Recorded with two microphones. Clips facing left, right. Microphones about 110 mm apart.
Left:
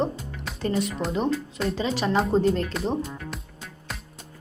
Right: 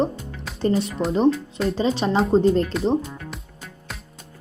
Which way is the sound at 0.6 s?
30° right (ahead or behind).